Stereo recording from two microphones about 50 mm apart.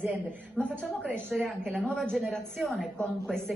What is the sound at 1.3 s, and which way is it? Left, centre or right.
Speech, centre.